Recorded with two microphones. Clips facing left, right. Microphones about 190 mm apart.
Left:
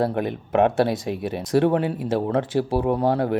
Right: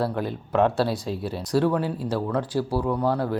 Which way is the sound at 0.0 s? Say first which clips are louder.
Left 3 dB; 20° left (ahead or behind).